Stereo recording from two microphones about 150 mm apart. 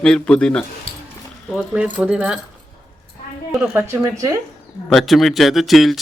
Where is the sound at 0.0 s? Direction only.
5° left (ahead or behind).